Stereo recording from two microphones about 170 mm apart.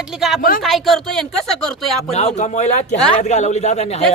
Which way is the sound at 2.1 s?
40° left (ahead or behind).